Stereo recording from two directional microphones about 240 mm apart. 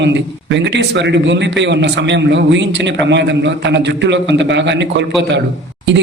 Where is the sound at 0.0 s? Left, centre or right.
Right.